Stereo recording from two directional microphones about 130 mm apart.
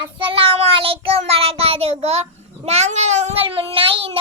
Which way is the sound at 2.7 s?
55° right (ahead or behind).